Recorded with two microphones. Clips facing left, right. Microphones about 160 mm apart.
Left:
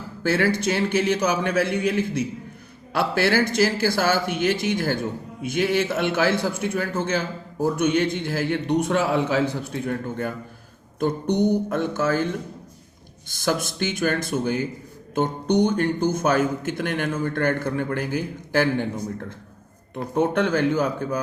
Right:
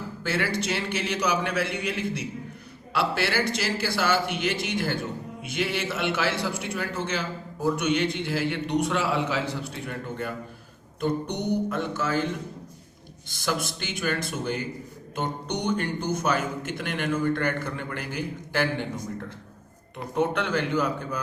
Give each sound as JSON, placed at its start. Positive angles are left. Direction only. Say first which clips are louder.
{"t": 0.2, "sound": "a man's voice", "louder": "left 7 dB", "side_deg": 45}
{"t": 13.2, "sound": "a man's voice", "louder": "left 5 dB", "side_deg": 50}
{"t": 20.1, "sound": "a man's voice", "louder": "left 4 dB", "side_deg": 45}